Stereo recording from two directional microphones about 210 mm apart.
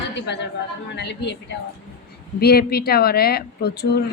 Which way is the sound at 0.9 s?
55° left (ahead or behind).